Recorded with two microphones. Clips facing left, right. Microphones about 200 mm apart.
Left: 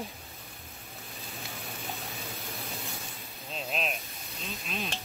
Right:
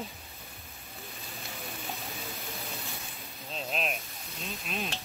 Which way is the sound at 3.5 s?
Centre (ahead or behind).